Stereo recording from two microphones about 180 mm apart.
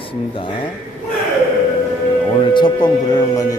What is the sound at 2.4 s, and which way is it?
Speech, 25° left (ahead or behind).